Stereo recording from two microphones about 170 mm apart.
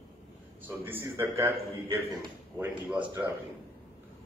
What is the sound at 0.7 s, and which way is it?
A man's voice, 10° right (ahead or behind).